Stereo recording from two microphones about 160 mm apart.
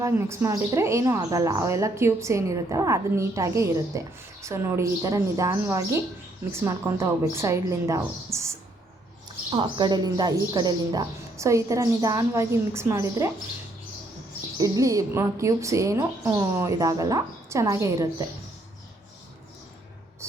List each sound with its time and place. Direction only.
0.0 s a woman's voice: 15° right (ahead or behind)
9.5 s a woman's voice: 30° right (ahead or behind)
14.6 s a woman's voice: 20° right (ahead or behind)